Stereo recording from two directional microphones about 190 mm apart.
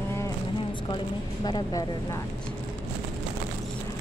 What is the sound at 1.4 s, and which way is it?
Speech, 20° left (ahead or behind).